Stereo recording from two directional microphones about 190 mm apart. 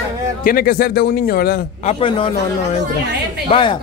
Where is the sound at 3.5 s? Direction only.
25° left (ahead or behind).